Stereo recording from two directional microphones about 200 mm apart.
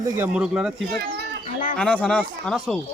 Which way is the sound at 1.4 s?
40° left (ahead or behind).